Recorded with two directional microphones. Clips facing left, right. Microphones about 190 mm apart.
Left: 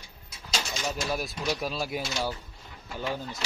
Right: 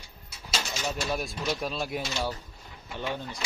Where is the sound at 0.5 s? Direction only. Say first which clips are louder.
Even; 5° right (ahead or behind).